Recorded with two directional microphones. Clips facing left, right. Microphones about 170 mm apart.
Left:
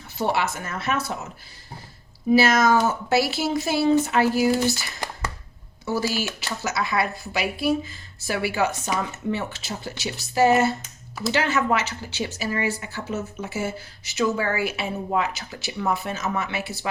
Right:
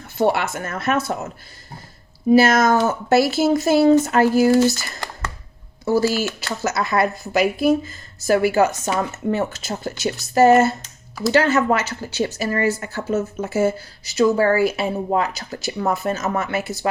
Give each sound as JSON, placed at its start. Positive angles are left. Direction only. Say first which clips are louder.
{"t": 0.2, "sound": "speech", "louder": "right 5 dB", "side_deg": -55}
{"t": 2.3, "sound": "speech", "louder": "right 3 dB", "side_deg": -50}